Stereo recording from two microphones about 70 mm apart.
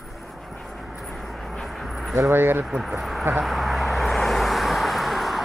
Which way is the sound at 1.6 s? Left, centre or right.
Centre.